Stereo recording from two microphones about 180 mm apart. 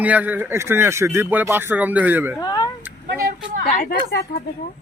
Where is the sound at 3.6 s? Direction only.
50° left (ahead or behind).